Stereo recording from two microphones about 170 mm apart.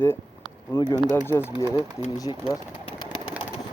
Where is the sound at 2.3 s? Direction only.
20° right (ahead or behind).